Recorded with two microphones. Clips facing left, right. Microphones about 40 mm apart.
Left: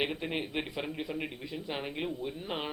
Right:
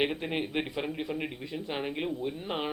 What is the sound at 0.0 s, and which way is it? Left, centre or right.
Speech, centre.